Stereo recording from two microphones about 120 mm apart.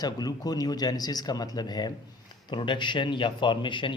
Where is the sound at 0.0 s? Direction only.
35° left (ahead or behind).